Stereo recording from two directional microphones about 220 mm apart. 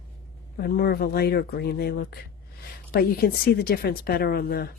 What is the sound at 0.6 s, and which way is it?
Speech, 45° left (ahead or behind).